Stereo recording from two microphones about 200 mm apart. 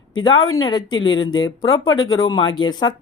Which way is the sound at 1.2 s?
20° left (ahead or behind).